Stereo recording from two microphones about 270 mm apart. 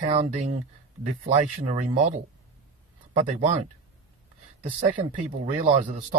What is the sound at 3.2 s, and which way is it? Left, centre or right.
Speech, right.